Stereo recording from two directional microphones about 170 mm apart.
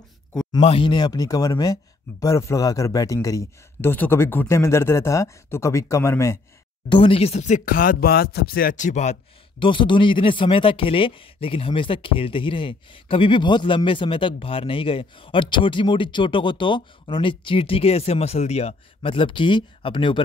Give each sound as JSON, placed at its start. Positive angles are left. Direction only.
{"t": 0.6, "sound": "speech", "side_deg": 35}
{"t": 6.9, "sound": "speech", "side_deg": 30}